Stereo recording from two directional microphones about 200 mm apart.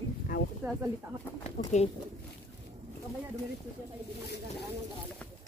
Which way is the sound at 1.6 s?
40° left (ahead or behind).